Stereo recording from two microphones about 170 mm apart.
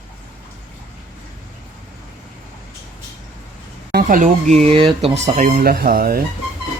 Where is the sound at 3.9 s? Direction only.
55° right (ahead or behind).